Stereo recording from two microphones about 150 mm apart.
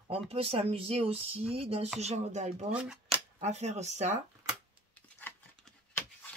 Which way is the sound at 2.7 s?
5° right (ahead or behind).